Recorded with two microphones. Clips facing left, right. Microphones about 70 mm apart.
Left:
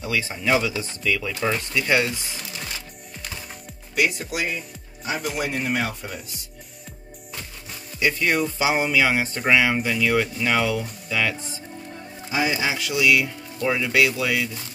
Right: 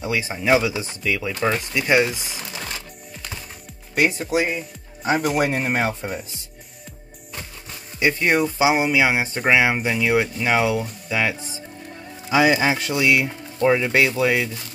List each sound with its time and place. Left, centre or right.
0.0 s speech: right
3.9 s speech: right
5.0 s speech: right
8.0 s speech: right
12.3 s speech: right
12.5 s speech: right